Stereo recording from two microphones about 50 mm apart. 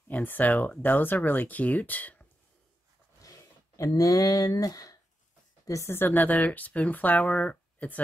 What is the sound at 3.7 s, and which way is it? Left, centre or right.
Speech, left.